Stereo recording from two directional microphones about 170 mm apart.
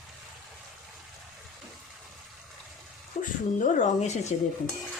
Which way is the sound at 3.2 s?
50° left (ahead or behind).